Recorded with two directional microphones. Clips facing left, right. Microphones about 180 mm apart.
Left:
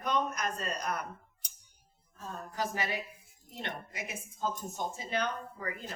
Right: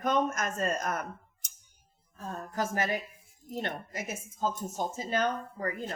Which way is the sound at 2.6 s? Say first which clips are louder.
Right 4 dB; 45° right (ahead or behind).